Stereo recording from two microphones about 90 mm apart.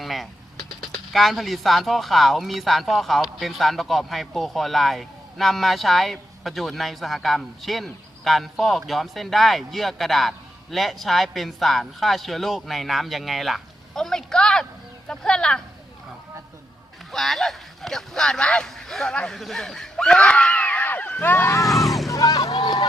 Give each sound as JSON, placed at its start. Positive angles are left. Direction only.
{"t": 0.0, "sound": "speech", "side_deg": 0}
{"t": 17.1, "sound": "speech", "side_deg": 5}
{"t": 21.6, "sound": "vehicle", "side_deg": 0}
{"t": 22.1, "sound": "boat", "side_deg": 40}